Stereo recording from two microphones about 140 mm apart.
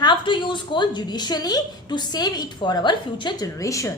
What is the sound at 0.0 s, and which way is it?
A woman's voice, 35° left (ahead or behind).